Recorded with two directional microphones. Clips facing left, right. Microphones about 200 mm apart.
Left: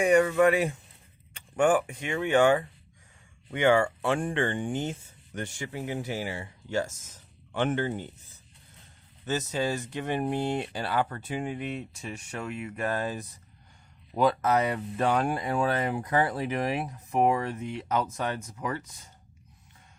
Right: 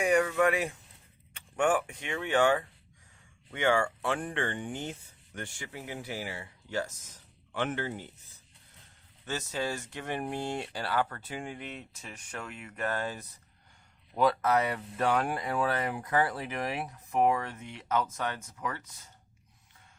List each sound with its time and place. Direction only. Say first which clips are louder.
0.0 s speech: left 5 dB; centre (ahead or behind); by 7.9 s 25° left (ahead or behind)
9.2 s speech: left 5 dB; 20° left (ahead or behind)